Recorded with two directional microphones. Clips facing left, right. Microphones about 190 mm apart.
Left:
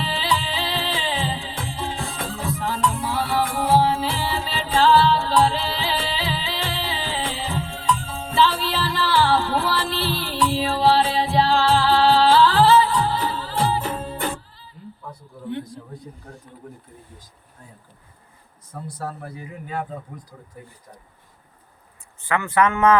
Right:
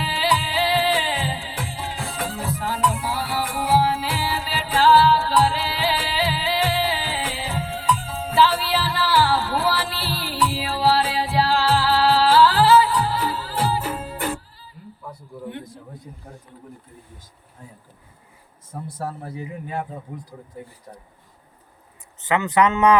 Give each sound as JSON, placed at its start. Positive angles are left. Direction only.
{"t": 0.1, "sound": "music", "side_deg": -10}
{"t": 18.7, "sound": "speech", "side_deg": -25}
{"t": 22.2, "sound": "a man's voice", "side_deg": -20}